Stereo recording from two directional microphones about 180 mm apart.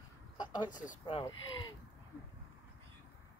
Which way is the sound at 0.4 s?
25° left (ahead or behind).